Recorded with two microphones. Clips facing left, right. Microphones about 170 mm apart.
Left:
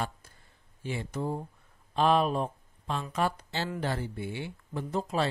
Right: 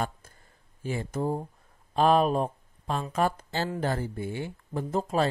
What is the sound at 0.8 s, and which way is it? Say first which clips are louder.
Speech: right 4 dB; 40° right (ahead or behind).